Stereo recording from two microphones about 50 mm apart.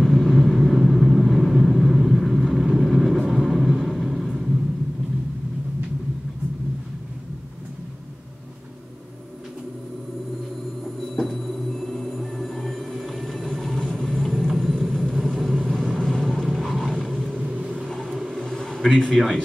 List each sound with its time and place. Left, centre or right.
0.0 s vehicle: centre
11.1 s a sound: centre
14.7 s vehicle: centre
17.3 s vehicle: right
17.8 s vehicle: centre
18.2 s a sound: centre
18.9 s a man's voice: centre